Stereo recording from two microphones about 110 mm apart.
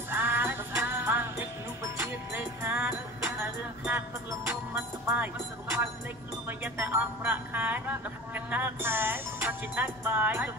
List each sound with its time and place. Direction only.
0.1 s music: 20° right (ahead or behind)